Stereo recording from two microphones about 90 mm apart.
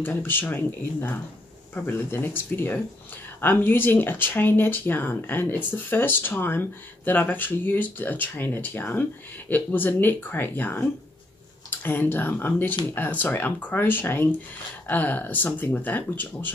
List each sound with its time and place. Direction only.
0.0 s speech: 25° left (ahead or behind)